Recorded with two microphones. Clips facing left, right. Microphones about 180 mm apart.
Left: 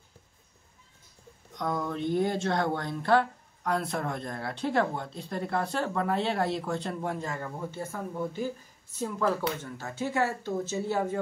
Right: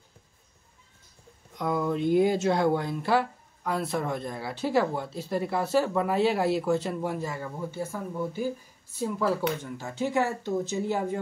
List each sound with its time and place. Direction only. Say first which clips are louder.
1.5 s speech: right 4 dB; 10° right (ahead or behind)